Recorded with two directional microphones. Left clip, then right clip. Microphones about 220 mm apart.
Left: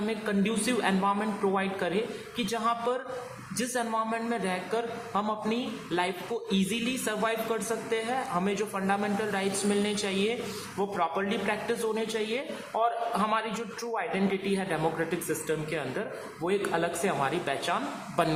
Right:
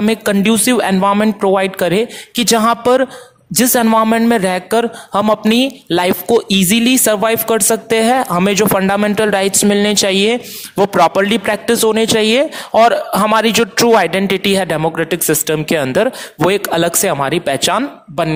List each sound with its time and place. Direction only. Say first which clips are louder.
0.1 s a man's voice: right 17 dB; 50° right (ahead or behind)